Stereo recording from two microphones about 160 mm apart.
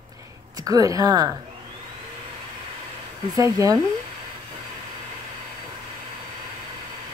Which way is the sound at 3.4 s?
20° right (ahead or behind).